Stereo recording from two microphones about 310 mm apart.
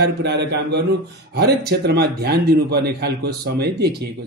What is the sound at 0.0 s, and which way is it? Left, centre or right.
A man's voice, right.